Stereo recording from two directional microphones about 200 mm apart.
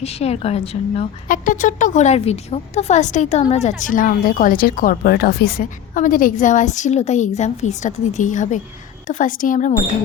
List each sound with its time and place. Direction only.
0.0 s speech: 30° left (ahead or behind)